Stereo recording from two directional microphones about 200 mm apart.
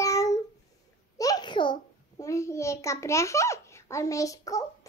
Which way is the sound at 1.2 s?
20° left (ahead or behind).